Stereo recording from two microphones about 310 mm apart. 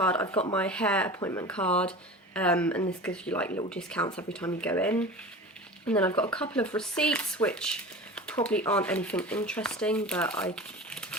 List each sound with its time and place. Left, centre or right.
0.0 s speech: centre
0.3 s speech: centre
0.5 s speech: centre